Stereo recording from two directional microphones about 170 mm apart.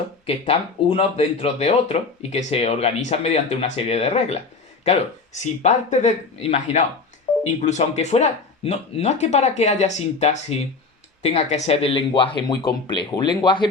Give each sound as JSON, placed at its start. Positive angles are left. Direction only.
{"t": 0.3, "sound": "speech", "side_deg": 35}